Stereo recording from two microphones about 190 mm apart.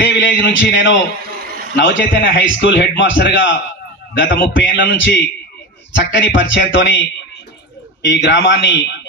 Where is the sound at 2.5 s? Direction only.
65° left (ahead or behind).